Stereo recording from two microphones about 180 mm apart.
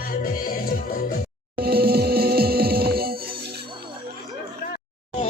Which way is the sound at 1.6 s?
60° right (ahead or behind).